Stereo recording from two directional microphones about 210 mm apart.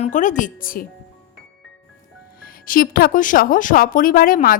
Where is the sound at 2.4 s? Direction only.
45° left (ahead or behind).